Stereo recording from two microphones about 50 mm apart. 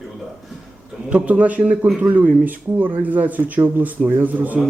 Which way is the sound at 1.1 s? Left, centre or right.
Right.